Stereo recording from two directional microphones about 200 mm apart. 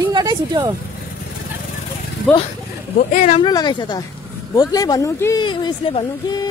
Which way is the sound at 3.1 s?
35° left (ahead or behind).